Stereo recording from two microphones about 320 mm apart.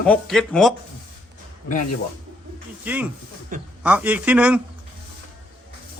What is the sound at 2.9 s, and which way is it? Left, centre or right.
Speech, centre.